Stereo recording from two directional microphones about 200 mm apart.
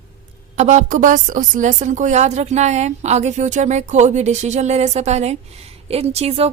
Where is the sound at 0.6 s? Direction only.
35° right (ahead or behind).